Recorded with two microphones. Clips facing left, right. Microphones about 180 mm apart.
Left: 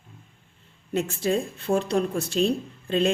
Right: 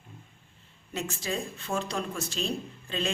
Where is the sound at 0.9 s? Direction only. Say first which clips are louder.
Left 9 dB; 55° left (ahead or behind).